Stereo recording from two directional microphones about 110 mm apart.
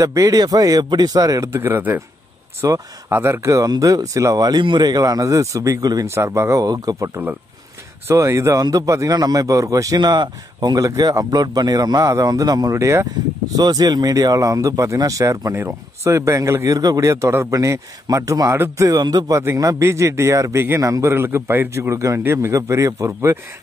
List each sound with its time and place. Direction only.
0.0 s speech: 30° right (ahead or behind)
8.1 s speech: 25° right (ahead or behind)
13.6 s speech: 35° right (ahead or behind)